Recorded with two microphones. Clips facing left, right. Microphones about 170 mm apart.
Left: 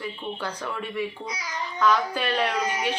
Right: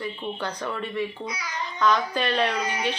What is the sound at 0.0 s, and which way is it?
Speech, 10° left (ahead or behind).